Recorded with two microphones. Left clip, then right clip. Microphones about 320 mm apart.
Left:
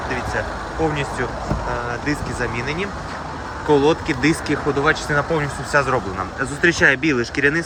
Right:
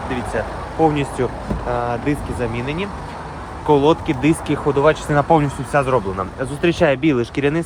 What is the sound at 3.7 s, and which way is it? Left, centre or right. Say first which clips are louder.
Speech: right 2 dB; centre.